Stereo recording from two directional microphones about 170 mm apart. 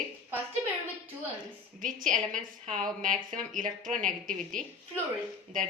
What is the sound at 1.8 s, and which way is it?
A woman's voice, 50° right (ahead or behind).